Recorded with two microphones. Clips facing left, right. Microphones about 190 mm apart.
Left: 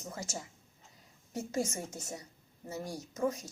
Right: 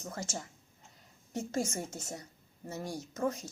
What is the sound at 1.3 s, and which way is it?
Speech, 15° left (ahead or behind).